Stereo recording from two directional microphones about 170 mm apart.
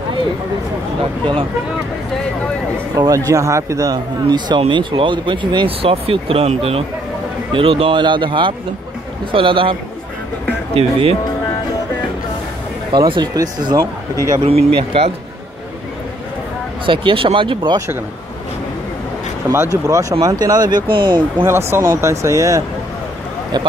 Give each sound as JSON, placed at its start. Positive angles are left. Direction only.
{"t": 3.3, "sound": "speech", "side_deg": -20}
{"t": 12.9, "sound": "speech", "side_deg": -25}
{"t": 16.8, "sound": "speech", "side_deg": -30}
{"t": 19.5, "sound": "speech", "side_deg": -15}
{"t": 21.5, "sound": "speech", "side_deg": -15}